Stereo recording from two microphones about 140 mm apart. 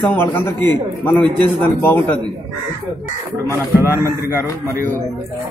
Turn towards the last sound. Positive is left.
turn(degrees=-20)  # may be behind; listen again after turning